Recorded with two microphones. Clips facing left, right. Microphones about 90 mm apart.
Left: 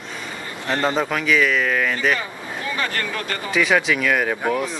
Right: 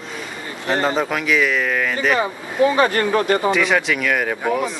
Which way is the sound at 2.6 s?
25° right (ahead or behind).